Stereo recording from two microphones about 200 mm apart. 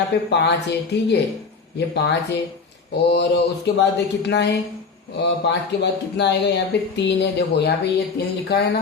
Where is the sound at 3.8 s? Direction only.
60° left (ahead or behind).